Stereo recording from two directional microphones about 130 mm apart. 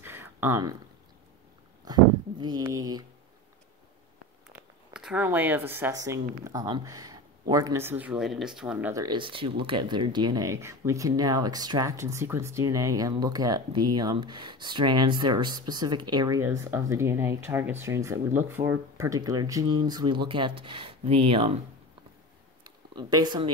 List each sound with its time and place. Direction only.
0.0 s a sound: 20° right (ahead or behind)
1.9 s speech: 35° right (ahead or behind)
4.9 s a sound: 5° right (ahead or behind)
5.2 s speech: 15° right (ahead or behind)
7.8 s speech: 15° right (ahead or behind)
8.2 s speech: centre (ahead or behind)
8.9 s speech: 35° right (ahead or behind)
16.3 s speech: 20° right (ahead or behind); by 21.5 s 45° right (ahead or behind)
22.6 s a sound: 30° right (ahead or behind)